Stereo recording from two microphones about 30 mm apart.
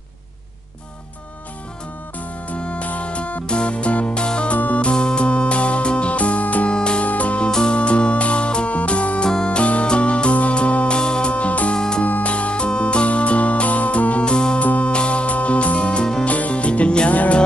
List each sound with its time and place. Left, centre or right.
2.1 s music: left
6.1 s music: left
6.7 s music: left
7.0 s music: left
7.7 s music: left
11.0 s music: left
11.3 s music: left
11.7 s music: left
12.2 s music: left
14.2 s music: left
14.6 s music: left
14.9 s music: left
16.3 s music: left